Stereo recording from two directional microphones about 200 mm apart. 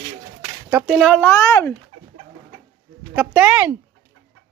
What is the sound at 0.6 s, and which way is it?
Speech, 5° right (ahead or behind).